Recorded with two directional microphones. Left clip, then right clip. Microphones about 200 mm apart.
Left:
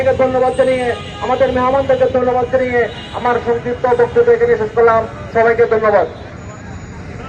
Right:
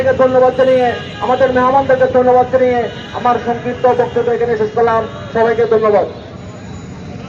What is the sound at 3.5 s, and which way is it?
Speech, 25° right (ahead or behind).